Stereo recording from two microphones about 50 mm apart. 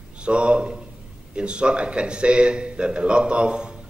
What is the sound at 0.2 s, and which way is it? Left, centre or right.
A man's voice, right.